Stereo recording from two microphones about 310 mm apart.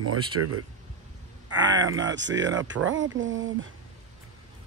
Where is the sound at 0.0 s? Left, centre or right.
Right.